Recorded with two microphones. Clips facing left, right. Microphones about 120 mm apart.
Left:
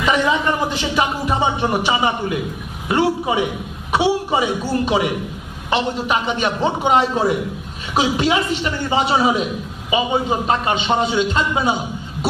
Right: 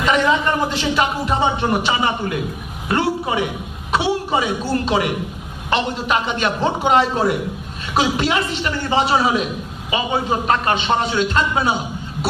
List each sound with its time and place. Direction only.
0.0 s a man's voice: 10° left (ahead or behind)